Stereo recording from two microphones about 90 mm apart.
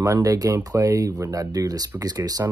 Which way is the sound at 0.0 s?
35° right (ahead or behind).